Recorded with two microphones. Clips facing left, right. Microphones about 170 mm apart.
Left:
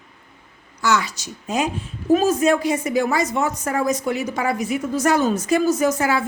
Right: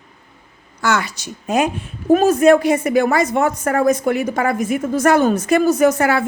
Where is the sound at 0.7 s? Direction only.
55° right (ahead or behind).